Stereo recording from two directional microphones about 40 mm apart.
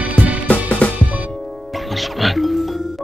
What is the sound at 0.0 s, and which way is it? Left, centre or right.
Music, right.